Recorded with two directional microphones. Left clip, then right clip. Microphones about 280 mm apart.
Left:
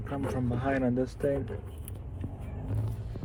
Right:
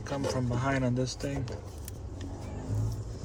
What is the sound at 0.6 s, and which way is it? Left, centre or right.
Speech, centre.